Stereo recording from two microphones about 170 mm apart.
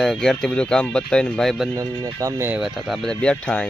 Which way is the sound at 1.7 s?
25° right (ahead or behind).